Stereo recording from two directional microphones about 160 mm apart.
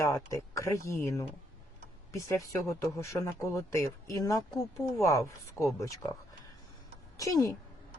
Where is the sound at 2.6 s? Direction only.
20° left (ahead or behind).